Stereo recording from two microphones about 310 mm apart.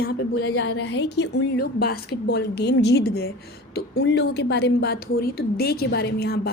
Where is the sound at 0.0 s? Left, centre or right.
Left.